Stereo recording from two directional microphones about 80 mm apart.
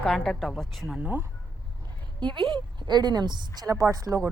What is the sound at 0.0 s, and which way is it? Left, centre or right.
Speech, centre.